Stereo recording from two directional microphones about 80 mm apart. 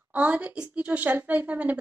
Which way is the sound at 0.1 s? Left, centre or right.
Centre.